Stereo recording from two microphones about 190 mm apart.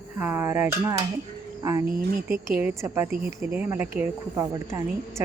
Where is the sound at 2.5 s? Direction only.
10° right (ahead or behind).